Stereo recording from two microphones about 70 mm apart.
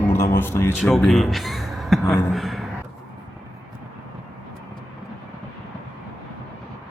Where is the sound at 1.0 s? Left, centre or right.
Centre.